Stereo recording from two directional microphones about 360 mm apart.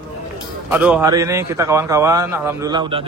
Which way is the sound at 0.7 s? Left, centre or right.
Centre.